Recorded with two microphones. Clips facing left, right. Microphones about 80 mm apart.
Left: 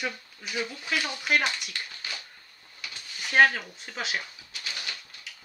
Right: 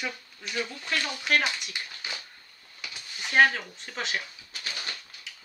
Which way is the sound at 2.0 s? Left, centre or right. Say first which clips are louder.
Right 2 dB; right.